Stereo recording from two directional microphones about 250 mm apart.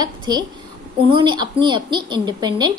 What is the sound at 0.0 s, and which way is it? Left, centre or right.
A woman's voice, centre.